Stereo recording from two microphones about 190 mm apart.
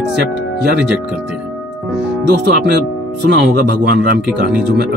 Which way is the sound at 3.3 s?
60° right (ahead or behind).